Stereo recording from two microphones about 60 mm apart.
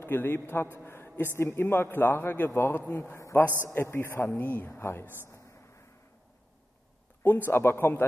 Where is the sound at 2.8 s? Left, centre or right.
Left.